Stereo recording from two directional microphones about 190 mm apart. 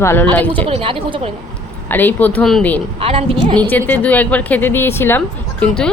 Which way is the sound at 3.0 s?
30° right (ahead or behind).